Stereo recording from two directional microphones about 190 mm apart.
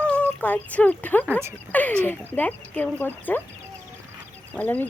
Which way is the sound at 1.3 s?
15° right (ahead or behind).